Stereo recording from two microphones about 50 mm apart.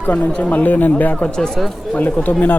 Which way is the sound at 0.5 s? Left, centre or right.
Left.